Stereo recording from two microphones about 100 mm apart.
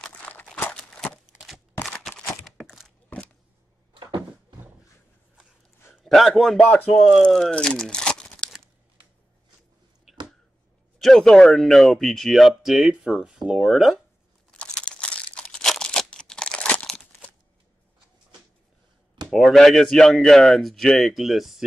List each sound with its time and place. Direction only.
0.0 s a sound: 10° left (ahead or behind)
3.9 s a sound: 50° right (ahead or behind)
5.9 s a man's voice: centre (ahead or behind)
11.0 s speech: 5° left (ahead or behind)
14.6 s crumpling: 10° left (ahead or behind)
16.9 s crunch: 10° left (ahead or behind)
19.3 s speech: 5° left (ahead or behind)